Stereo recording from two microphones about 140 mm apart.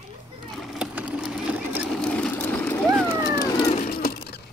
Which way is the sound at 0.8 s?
5° right (ahead or behind).